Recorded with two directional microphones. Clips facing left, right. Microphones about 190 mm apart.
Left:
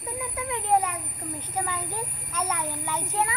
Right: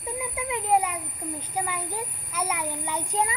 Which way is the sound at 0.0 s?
10° right (ahead or behind).